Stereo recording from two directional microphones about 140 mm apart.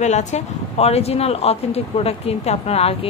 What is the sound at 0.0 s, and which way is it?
Speech, 55° left (ahead or behind).